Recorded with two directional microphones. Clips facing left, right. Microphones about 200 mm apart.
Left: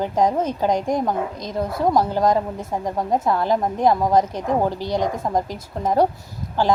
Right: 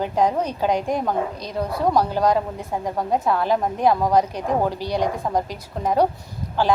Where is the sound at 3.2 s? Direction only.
15° left (ahead or behind).